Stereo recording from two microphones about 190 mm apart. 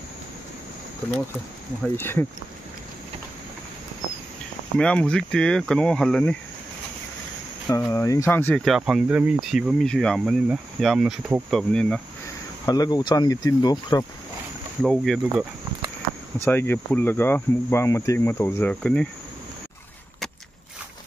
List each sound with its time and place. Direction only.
2.0 s speech: 10° left (ahead or behind)
4.7 s speech: 5° left (ahead or behind)
7.9 s speech: 15° left (ahead or behind); by 11.6 s 5° right (ahead or behind)
11.7 s speech: 5° left (ahead or behind)
12.6 s speech: 20° left (ahead or behind)
14.8 s speech: centre (ahead or behind)
16.4 s speech: 10° left (ahead or behind)